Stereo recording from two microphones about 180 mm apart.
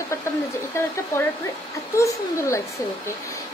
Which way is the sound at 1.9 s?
15° left (ahead or behind).